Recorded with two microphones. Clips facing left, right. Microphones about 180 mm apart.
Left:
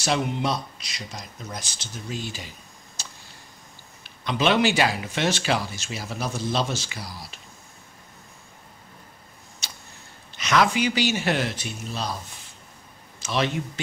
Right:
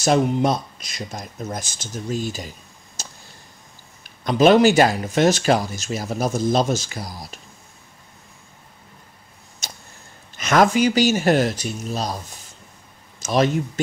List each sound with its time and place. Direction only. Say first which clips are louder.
0.0 s speech: right 7 dB; 45° right (ahead or behind)
3.0 s a sound: right 4 dB; 45° right (ahead or behind)
4.0 s speech: right 8 dB; 45° right (ahead or behind)
9.6 s tick-tock: right 5 dB; 45° right (ahead or behind)
10.3 s speech: right 5 dB; 50° right (ahead or behind)
13.2 s a man's voice: right 6 dB; 45° right (ahead or behind)